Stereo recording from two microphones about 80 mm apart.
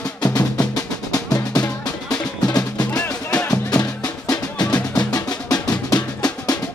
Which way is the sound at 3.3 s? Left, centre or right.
Centre.